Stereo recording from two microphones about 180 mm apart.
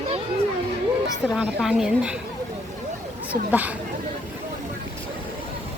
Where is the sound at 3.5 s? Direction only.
10° right (ahead or behind).